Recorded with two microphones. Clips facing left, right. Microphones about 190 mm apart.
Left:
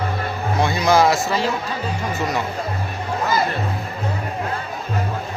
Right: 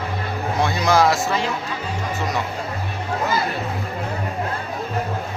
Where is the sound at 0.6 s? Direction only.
Centre (ahead or behind).